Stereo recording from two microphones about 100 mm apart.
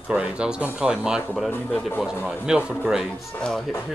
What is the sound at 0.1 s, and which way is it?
Speech, 10° right (ahead or behind).